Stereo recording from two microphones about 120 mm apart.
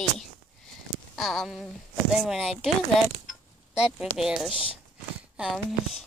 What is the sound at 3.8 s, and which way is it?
Speech, 5° right (ahead or behind).